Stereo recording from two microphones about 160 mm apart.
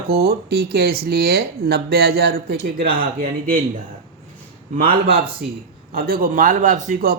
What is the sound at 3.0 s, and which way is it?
Speech, 65° right (ahead or behind).